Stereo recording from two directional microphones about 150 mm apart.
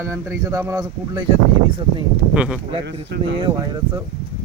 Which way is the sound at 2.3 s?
5° right (ahead or behind).